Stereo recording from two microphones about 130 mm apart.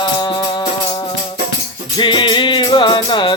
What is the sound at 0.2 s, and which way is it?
Music, 35° left (ahead or behind).